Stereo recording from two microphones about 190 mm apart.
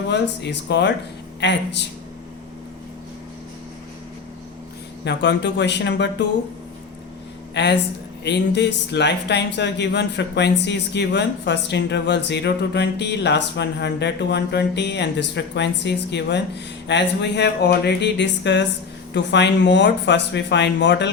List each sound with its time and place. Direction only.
0.1 s speech: 65° left (ahead or behind)
5.0 s speech: 65° left (ahead or behind)
7.5 s speech: 65° left (ahead or behind)